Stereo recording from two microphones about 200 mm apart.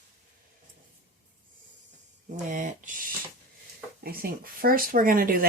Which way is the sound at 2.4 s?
40° right (ahead or behind).